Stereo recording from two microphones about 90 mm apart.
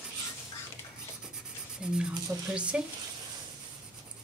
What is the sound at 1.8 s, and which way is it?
Speech, 10° right (ahead or behind).